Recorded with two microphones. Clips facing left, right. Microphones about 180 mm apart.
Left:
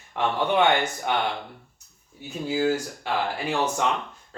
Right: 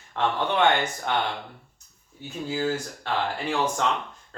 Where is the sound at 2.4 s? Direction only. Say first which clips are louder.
Left 3 dB; 10° left (ahead or behind).